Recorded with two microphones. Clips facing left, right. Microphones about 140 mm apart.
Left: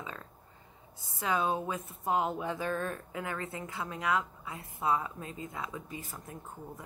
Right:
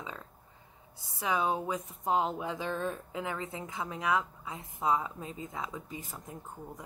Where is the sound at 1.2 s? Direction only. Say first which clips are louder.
Even; 15° right (ahead or behind).